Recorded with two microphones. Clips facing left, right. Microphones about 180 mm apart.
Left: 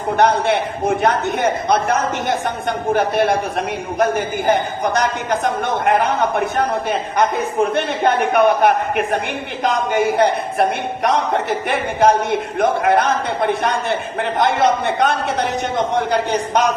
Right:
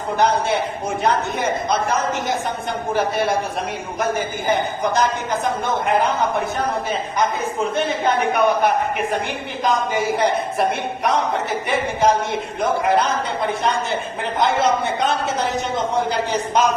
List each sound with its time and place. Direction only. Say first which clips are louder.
0.2 s a woman's voice: left 3 dB; 65° left (ahead or behind)
4.4 s a woman's voice: left 2 dB; 60° left (ahead or behind)
14.6 s a woman's voice: left 3 dB; 60° left (ahead or behind)